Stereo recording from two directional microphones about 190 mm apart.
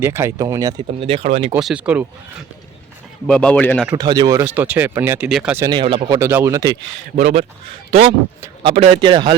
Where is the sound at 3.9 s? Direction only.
20° right (ahead or behind); by 5.6 s 5° right (ahead or behind).